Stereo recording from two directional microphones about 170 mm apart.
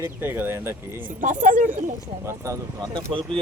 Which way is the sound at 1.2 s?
50° right (ahead or behind).